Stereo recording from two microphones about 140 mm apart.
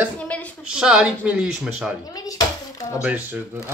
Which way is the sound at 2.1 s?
25° left (ahead or behind).